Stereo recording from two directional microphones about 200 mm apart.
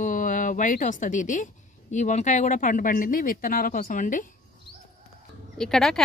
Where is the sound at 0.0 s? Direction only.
40° left (ahead or behind).